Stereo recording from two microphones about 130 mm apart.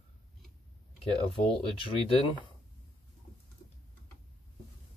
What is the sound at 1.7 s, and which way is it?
Speech, 40° left (ahead or behind).